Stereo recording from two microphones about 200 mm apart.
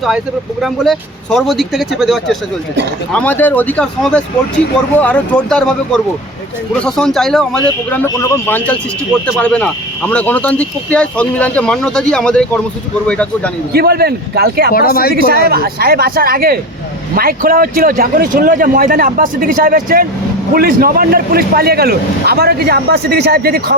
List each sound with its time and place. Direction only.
0.6 s speech: centre (ahead or behind)
6.8 s speech: 5° left (ahead or behind)
13.7 s a man's voice: 50° right (ahead or behind)
14.7 s speech: 50° left (ahead or behind)
15.1 s a man's voice: 50° right (ahead or behind)